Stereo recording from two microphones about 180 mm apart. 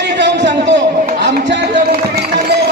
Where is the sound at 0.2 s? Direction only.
75° right (ahead or behind).